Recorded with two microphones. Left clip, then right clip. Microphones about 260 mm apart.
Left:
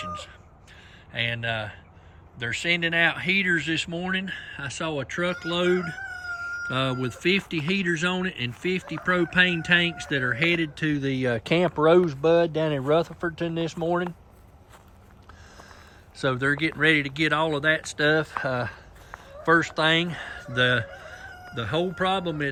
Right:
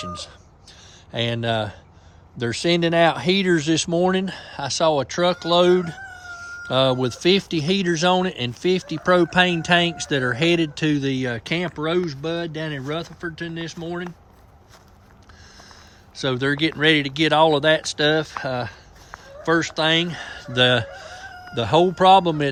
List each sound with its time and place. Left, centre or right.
1.2 s speech: centre
16.1 s speech: centre